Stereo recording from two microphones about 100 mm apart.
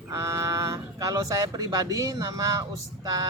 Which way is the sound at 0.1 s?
30° right (ahead or behind).